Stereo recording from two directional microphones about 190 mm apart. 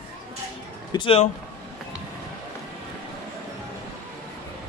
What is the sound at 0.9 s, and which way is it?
Speech, 30° left (ahead or behind).